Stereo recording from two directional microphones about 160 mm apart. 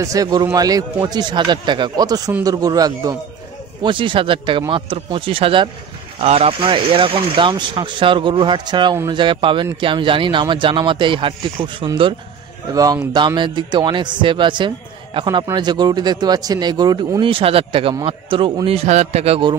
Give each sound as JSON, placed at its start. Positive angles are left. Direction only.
{"t": 0.0, "sound": "a man's voice", "side_deg": -20}